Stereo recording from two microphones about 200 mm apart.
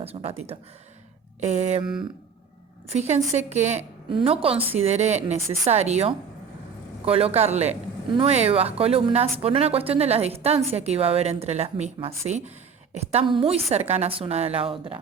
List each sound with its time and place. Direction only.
0.0 s a man's voice: 30° right (ahead or behind)
2.9 s a man's voice: 35° right (ahead or behind)